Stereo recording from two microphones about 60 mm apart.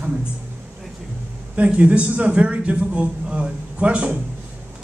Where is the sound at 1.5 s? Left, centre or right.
Right.